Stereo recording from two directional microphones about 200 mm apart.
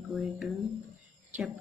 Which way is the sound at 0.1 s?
Centre (ahead or behind).